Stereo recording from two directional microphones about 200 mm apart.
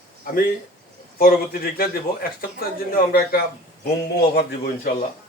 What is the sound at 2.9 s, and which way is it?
Speech, 50° left (ahead or behind).